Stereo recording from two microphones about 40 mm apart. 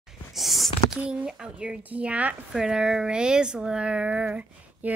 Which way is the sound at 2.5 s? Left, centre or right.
Centre.